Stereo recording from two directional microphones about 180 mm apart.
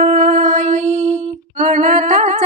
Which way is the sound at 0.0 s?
40° right (ahead or behind).